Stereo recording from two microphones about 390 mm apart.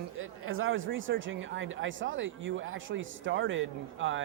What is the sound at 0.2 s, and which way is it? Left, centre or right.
Speech, right.